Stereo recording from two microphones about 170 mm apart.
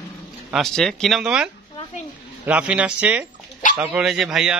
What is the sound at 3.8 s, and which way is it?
Speech, 5° right (ahead or behind).